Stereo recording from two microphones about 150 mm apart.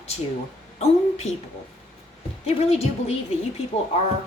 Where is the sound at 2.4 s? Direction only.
45° left (ahead or behind).